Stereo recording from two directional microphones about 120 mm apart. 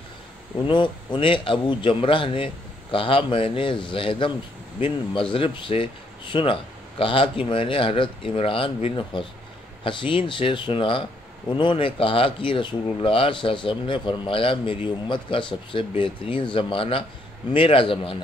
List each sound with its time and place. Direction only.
0.7 s speech: 40° left (ahead or behind)